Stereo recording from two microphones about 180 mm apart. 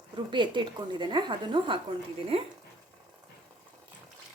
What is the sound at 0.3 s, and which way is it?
Speech, 25° right (ahead or behind).